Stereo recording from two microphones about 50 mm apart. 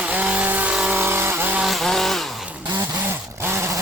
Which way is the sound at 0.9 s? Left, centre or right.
Right.